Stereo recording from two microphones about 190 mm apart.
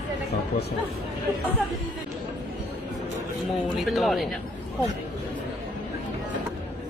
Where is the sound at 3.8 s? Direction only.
Centre (ahead or behind).